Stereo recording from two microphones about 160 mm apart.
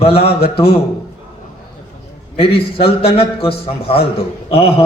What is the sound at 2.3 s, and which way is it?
A man's voice, 35° left (ahead or behind).